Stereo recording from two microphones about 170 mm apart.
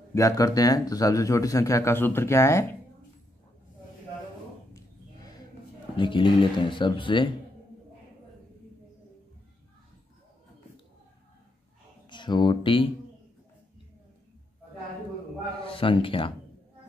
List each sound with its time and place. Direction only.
0.1 s speech: 20° left (ahead or behind)
5.9 s speech: 30° left (ahead or behind)
12.1 s speech: 25° left (ahead or behind)
15.6 s a man's voice: 30° left (ahead or behind)